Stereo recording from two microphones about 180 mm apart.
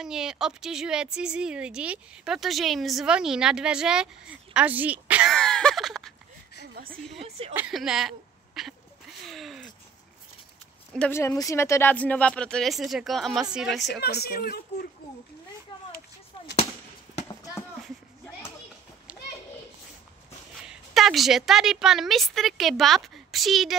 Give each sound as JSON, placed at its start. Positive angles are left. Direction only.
{"t": 0.0, "sound": "a woman's voice", "side_deg": -5}
{"t": 5.3, "sound": "a sound", "side_deg": 5}
{"t": 6.9, "sound": "a woman's voice", "side_deg": 0}
{"t": 11.0, "sound": "a woman's voice", "side_deg": 15}
{"t": 13.9, "sound": "speech", "side_deg": 60}
{"t": 17.8, "sound": "a sound", "side_deg": 10}
{"t": 20.6, "sound": "a woman's voice", "side_deg": 0}